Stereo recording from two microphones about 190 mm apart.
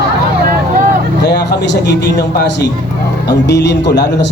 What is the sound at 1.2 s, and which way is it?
A man's voice, 65° left (ahead or behind).